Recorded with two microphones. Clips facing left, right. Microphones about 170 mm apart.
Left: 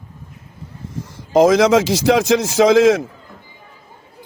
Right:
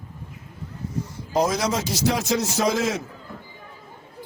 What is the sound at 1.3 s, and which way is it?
Speech, 90° left.